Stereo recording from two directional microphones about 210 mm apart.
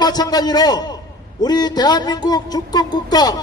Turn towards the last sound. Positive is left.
turn(degrees=20)  # may be behind; listen again after turning